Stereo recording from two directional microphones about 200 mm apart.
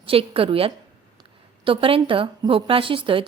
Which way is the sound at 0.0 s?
30° right (ahead or behind).